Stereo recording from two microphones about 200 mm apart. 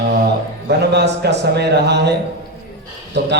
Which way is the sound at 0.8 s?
55° right (ahead or behind).